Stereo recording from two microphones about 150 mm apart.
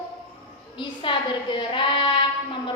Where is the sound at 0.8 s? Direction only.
35° left (ahead or behind).